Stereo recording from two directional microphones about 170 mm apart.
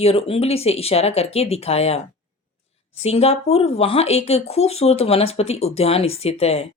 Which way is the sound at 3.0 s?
35° left (ahead or behind).